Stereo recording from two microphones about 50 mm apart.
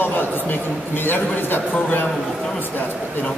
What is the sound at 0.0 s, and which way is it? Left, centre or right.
A woman's voice, left.